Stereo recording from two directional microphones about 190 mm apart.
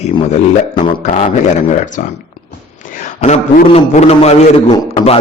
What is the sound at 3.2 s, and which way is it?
A man's voice, 35° left (ahead or behind).